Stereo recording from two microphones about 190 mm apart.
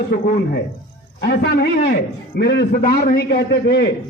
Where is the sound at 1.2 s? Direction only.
55° left (ahead or behind).